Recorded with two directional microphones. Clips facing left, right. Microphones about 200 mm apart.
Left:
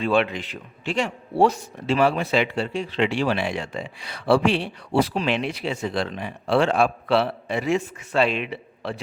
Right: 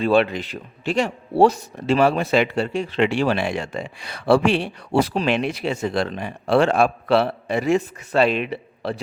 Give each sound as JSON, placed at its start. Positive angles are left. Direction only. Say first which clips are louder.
{"t": 0.0, "sound": "a man's voice", "louder": "right 4 dB", "side_deg": -35}